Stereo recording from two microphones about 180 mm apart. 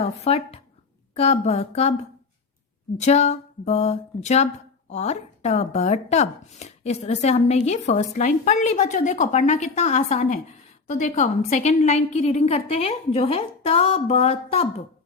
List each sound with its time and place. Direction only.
0.0 s speech: 35° left (ahead or behind)
3.0 s speech: 40° left (ahead or behind)